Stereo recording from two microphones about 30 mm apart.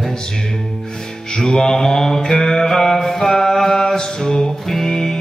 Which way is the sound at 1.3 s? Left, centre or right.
Left.